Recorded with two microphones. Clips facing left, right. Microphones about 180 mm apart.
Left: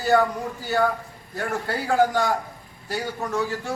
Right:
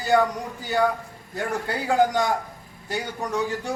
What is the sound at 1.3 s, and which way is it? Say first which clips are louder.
A man's voice: even; 15° right (ahead or behind).